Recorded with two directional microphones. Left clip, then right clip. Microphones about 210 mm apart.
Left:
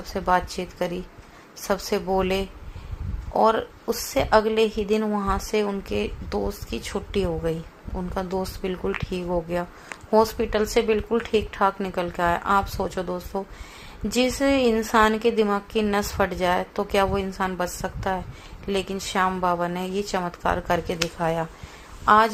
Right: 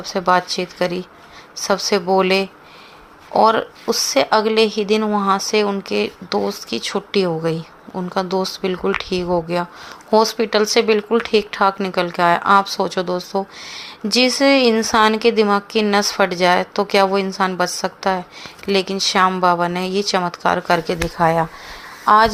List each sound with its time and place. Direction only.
0.0 s speech: 20° right (ahead or behind)